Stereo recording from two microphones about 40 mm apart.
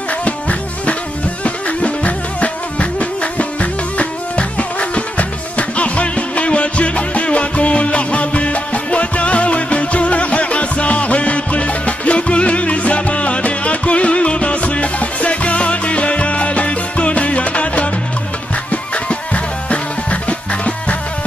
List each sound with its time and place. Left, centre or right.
0.2 s music: left